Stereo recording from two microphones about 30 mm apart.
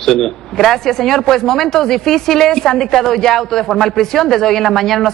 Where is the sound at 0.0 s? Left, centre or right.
Centre.